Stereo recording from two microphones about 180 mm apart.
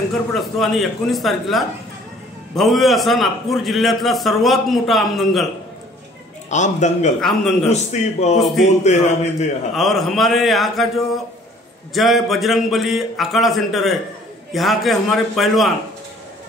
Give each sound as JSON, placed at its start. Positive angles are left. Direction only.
{"t": 0.3, "sound": "a man's voice", "side_deg": 0}
{"t": 6.5, "sound": "a man's voice", "side_deg": 40}
{"t": 7.2, "sound": "a man's voice", "side_deg": 0}
{"t": 7.7, "sound": "a man's voice", "side_deg": 40}
{"t": 8.4, "sound": "a man's voice", "side_deg": 0}
{"t": 8.8, "sound": "a man's voice", "side_deg": 40}
{"t": 9.8, "sound": "a man's voice", "side_deg": 0}
{"t": 11.9, "sound": "a man's voice", "side_deg": 0}